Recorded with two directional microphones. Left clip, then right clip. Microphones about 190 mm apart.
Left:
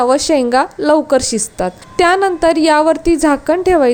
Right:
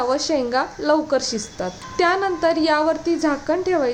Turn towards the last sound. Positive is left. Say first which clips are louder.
# left 8 dB
turn(degrees=40)  # may be behind; listen again after turning